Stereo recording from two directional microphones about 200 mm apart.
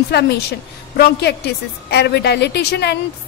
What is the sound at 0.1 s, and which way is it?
A woman's voice, 55° left (ahead or behind).